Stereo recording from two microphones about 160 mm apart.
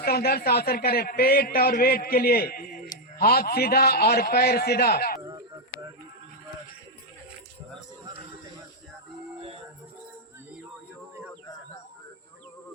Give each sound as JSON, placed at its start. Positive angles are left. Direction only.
{"t": 0.0, "sound": "a man's voice", "side_deg": 75}